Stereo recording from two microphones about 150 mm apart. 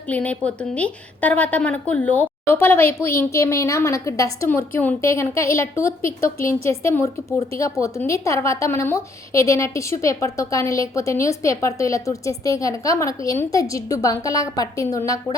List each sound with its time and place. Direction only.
0.1 s a woman's voice: 10° left (ahead or behind)